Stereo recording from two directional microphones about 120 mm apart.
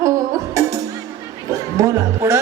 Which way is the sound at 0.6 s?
25° right (ahead or behind).